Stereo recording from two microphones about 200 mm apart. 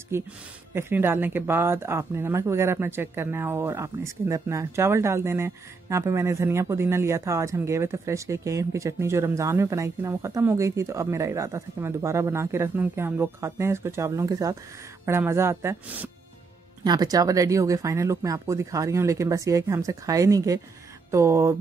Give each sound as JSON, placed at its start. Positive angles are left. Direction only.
{"t": 0.1, "sound": "speech", "side_deg": -15}